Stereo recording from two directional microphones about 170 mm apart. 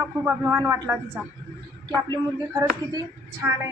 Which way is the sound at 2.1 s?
20° right (ahead or behind).